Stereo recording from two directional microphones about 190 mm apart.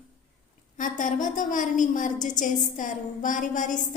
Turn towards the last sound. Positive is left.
turn(degrees=40)  # may be behind; listen again after turning